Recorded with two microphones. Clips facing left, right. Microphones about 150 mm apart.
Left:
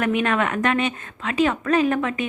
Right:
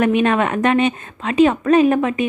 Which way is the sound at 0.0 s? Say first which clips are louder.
Right 5 dB; 20° right (ahead or behind).